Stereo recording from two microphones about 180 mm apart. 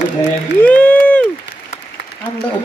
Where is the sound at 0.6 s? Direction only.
10° left (ahead or behind).